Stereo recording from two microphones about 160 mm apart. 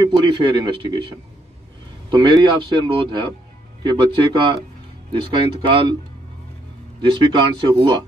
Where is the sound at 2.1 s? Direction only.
30° right (ahead or behind).